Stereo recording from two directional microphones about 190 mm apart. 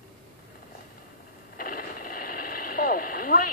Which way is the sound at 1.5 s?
50° left (ahead or behind).